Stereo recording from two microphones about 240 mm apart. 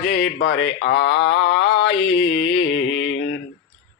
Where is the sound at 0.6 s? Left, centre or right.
Left.